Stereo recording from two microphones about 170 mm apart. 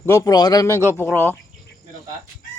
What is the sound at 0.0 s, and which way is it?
Speech, 15° left (ahead or behind).